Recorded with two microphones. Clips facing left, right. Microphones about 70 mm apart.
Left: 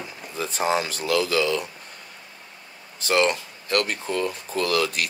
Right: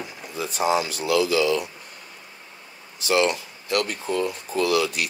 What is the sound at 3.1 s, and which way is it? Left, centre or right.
Speech, left.